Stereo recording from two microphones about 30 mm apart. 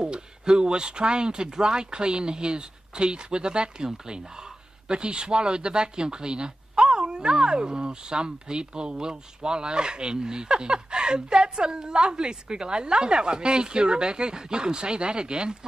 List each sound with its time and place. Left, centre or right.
0.0 s speech: right